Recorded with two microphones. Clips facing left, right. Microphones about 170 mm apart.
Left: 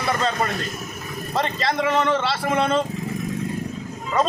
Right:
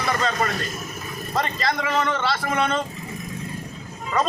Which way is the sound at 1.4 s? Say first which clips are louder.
Left 2 dB; 30° left (ahead or behind).